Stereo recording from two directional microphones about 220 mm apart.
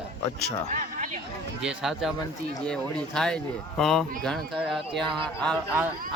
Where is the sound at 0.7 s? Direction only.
35° right (ahead or behind).